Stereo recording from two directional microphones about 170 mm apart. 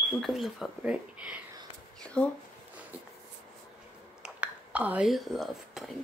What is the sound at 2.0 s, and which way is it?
Speech, 5° left (ahead or behind).